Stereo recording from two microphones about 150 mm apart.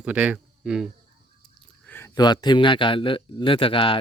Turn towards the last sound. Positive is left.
turn(degrees=35)  # may be behind; listen again after turning